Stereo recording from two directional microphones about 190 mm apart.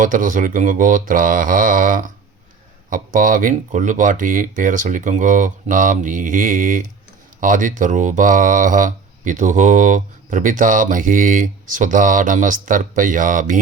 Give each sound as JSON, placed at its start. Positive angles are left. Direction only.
{"t": 0.0, "sound": "speech", "side_deg": -45}